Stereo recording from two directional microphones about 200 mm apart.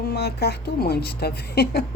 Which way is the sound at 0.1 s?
55° left (ahead or behind).